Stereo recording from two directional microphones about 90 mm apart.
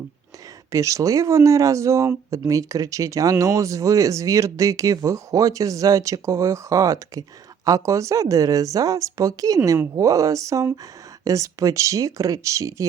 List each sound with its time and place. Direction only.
0.7 s speech: 35° right (ahead or behind)